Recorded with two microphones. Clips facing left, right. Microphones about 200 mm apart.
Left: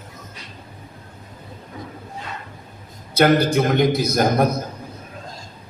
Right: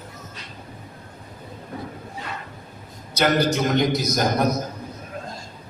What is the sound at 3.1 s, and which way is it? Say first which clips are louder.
A man's voice: left 4 dB; 55° left (ahead or behind).